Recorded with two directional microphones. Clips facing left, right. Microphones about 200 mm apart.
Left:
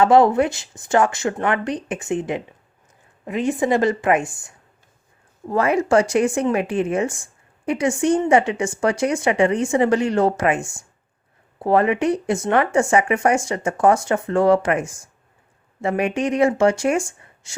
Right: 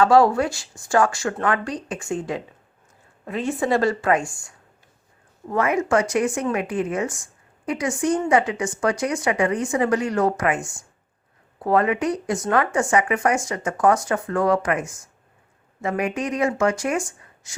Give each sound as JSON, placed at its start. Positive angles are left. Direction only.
{"t": 0.0, "sound": "a woman's voice", "side_deg": 20}
{"t": 5.5, "sound": "speech", "side_deg": 30}